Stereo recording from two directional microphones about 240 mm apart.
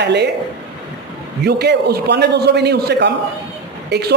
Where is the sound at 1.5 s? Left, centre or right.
Right.